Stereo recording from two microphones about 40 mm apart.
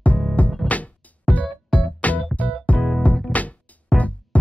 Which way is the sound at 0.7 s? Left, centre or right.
Left.